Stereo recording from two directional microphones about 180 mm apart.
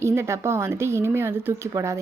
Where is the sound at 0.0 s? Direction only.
15° right (ahead or behind).